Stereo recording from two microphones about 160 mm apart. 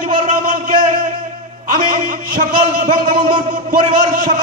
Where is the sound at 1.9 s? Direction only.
55° right (ahead or behind).